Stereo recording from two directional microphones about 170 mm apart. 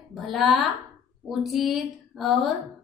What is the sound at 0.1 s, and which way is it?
A woman's voice, centre (ahead or behind).